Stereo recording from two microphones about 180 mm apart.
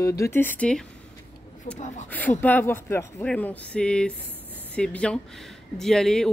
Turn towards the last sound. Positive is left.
turn(degrees=0)  # may be behind; listen again after turning